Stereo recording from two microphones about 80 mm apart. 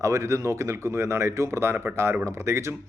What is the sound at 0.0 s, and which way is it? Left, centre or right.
A man's voice, right.